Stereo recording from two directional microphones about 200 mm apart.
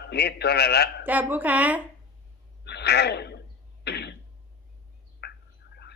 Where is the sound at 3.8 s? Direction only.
55° left (ahead or behind).